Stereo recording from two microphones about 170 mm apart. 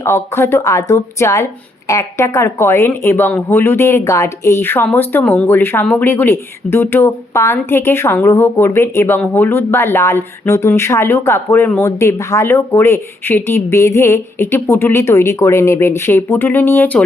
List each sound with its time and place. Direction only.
0.0 s speech: 15° left (ahead or behind)